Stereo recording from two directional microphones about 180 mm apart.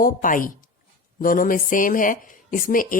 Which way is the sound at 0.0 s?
50° left (ahead or behind).